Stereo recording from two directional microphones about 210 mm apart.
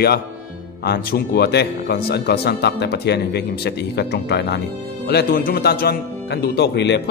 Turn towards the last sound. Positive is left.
turn(degrees=55)  # may be behind; listen again after turning